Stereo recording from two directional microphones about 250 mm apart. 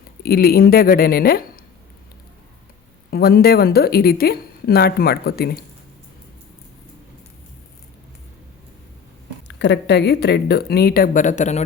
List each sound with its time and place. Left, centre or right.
0.2 s speech: left
3.1 s speech: left
9.5 s speech: left